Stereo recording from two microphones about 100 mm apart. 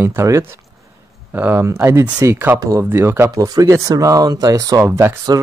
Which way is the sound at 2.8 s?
20° right (ahead or behind).